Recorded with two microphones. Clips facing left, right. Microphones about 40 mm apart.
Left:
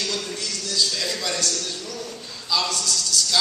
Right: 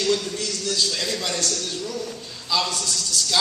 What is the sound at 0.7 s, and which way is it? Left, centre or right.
Speech, right.